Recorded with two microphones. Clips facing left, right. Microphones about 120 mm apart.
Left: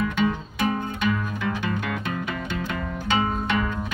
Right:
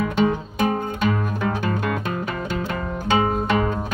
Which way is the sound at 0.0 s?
40° right (ahead or behind).